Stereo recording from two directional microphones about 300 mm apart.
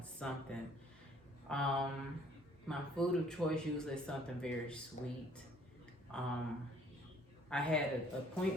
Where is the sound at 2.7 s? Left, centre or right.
Centre.